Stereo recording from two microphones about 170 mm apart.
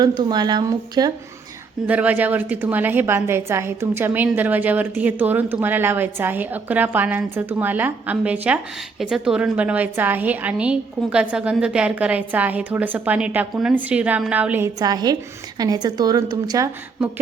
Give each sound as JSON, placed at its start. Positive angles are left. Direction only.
{"t": 0.0, "sound": "a woman's voice", "side_deg": -25}
{"t": 1.9, "sound": "a woman's voice", "side_deg": -10}
{"t": 14.8, "sound": "a woman's voice", "side_deg": -25}